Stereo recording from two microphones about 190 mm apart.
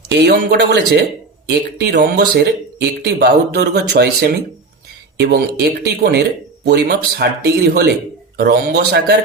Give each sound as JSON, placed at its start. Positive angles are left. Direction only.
{"t": 0.2, "sound": "speech", "side_deg": -60}